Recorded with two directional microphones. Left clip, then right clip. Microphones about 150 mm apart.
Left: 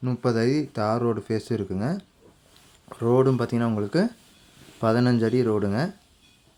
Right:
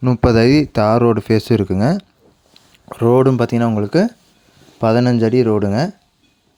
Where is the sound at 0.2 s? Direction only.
65° right (ahead or behind); by 5.9 s 50° right (ahead or behind).